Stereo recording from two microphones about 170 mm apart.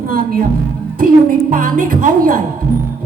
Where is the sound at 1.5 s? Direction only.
50° right (ahead or behind).